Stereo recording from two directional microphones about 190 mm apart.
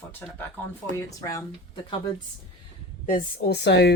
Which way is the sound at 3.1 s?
60° left (ahead or behind).